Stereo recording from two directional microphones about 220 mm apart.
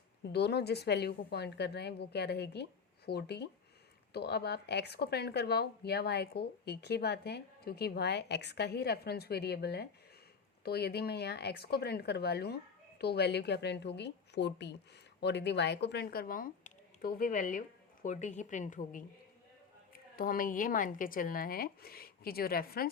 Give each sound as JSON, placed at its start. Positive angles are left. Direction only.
{"t": 0.3, "sound": "a woman's voice", "side_deg": 50}